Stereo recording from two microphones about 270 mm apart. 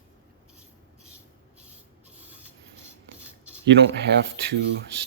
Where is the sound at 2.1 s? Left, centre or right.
Centre.